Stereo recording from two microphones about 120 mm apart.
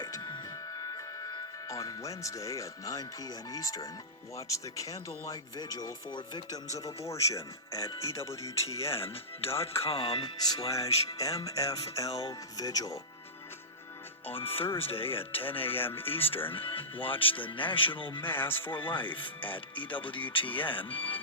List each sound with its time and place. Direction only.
0.0 s music: 30° left (ahead or behind)
4.4 s speech: 25° left (ahead or behind)
8.9 s speech: 55° left (ahead or behind)
10.1 s speech: 30° left (ahead or behind)
14.3 s speech: 50° left (ahead or behind)
15.8 s speech: 15° left (ahead or behind)
16.0 s speech: 50° left (ahead or behind)
18.2 s speech: 15° left (ahead or behind)
18.8 s speech: 45° left (ahead or behind)